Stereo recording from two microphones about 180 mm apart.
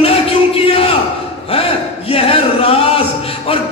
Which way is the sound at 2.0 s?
35° left (ahead or behind).